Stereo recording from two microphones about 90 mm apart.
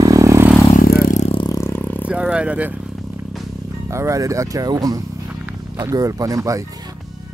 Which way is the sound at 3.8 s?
35° right (ahead or behind).